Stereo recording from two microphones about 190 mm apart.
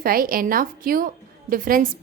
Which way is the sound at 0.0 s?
50° right (ahead or behind).